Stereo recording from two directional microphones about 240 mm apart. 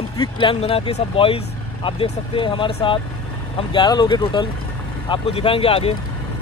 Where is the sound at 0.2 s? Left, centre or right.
Left.